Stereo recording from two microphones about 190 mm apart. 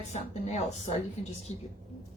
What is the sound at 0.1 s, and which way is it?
Speech, 35° left (ahead or behind).